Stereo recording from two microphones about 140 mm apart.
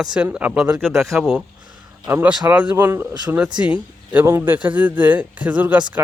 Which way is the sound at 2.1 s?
15° right (ahead or behind).